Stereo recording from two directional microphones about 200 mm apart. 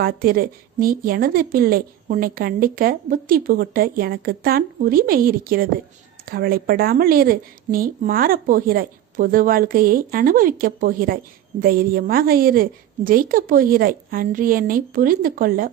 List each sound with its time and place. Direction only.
0.0 s a woman's voice: 50° right (ahead or behind)